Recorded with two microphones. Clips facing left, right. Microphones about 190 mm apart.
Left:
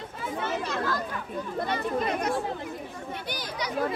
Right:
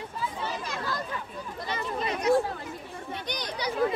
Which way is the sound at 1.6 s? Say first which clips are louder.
Left 4 dB; 55° left (ahead or behind).